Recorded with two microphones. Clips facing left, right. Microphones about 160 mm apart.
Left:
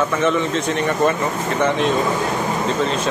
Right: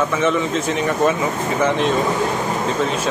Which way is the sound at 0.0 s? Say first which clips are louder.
Even; centre (ahead or behind).